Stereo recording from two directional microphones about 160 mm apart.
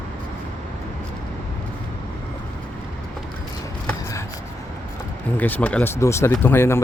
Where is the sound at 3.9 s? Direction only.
20° left (ahead or behind).